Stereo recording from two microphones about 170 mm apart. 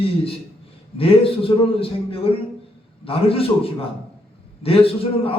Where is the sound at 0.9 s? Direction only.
35° left (ahead or behind).